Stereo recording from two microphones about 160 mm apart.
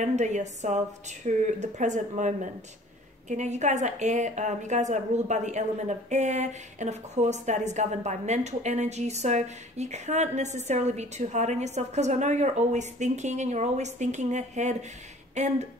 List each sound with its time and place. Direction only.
0.0 s a woman's voice: 45° right (ahead or behind)